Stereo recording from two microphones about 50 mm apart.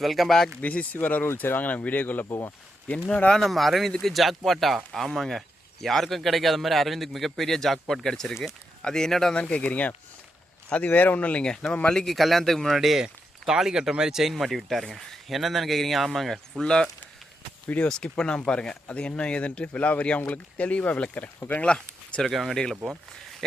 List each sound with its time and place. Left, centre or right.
0.0 s speech: centre
0.6 s speech: left
0.9 s speech: left
2.9 s speech: left
3.3 s speech: centre
9.3 s speech: left
11.4 s speech: centre
12.0 s speech: centre
17.7 s speech: left
21.6 s speech: left
22.3 s speech: centre
22.8 s speech: centre